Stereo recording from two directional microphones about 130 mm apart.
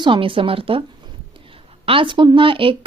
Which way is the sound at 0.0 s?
40° right (ahead or behind).